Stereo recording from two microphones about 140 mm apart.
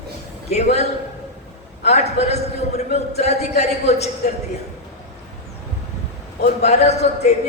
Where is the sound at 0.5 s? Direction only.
50° left (ahead or behind).